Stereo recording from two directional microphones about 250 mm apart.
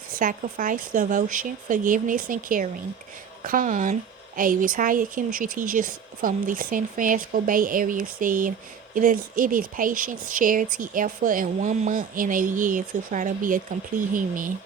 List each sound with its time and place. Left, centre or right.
0.2 s speech: right